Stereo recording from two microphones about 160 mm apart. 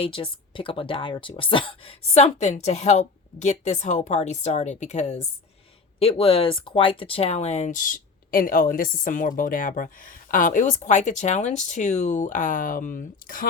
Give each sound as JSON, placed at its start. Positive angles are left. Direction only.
{"t": 0.0, "sound": "speech", "side_deg": 35}